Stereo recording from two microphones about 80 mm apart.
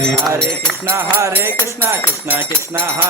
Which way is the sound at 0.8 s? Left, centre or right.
Right.